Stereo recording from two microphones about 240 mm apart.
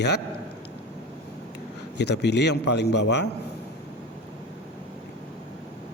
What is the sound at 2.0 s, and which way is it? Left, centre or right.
A man's voice, left.